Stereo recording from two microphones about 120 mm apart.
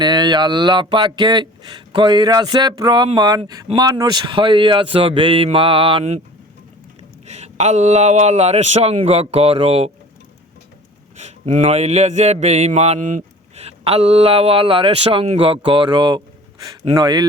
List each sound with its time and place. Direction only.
0.0 s a man's voice: 35° right (ahead or behind)
7.3 s speech: 65° right (ahead or behind)
11.2 s a man's voice: 80° right; by 17.2 s 35° right (ahead or behind)